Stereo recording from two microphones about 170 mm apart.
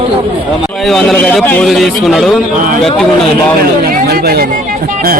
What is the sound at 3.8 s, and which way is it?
Speech, 60° right (ahead or behind).